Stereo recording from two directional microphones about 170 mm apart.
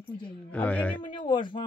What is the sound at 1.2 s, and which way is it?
Speech, 30° left (ahead or behind).